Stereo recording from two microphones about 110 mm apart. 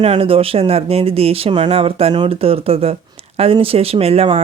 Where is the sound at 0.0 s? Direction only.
65° right (ahead or behind).